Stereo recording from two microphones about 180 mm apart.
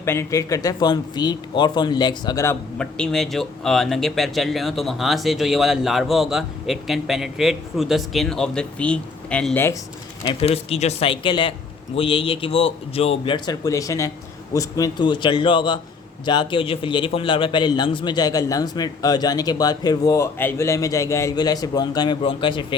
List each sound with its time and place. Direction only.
0.0 s a man's voice: 15° left (ahead or behind)
2.7 s speech: 5° left (ahead or behind)
10.4 s a man's voice: 35° left (ahead or behind)